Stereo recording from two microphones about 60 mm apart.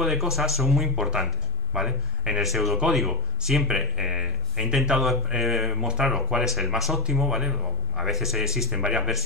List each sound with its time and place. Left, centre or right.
0.0 s speech: centre